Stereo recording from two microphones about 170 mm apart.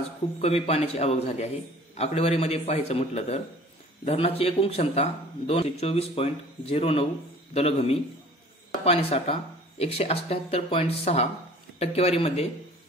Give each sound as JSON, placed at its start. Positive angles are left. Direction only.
{"t": 0.4, "sound": "a man's voice", "side_deg": 35}